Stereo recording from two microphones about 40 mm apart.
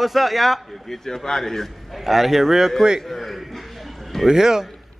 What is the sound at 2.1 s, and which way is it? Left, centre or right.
Speech, centre.